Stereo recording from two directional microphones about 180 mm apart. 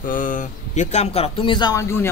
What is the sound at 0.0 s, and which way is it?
Speech, 50° left (ahead or behind).